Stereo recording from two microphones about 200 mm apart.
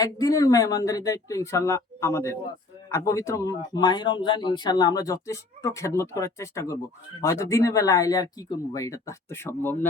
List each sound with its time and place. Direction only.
0.0 s speech: 15° left (ahead or behind)